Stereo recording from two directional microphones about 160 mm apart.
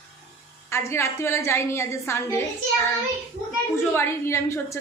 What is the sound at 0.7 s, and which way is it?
A woman's voice, 15° left (ahead or behind).